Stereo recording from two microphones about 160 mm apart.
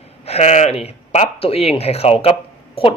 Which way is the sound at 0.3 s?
45° left (ahead or behind).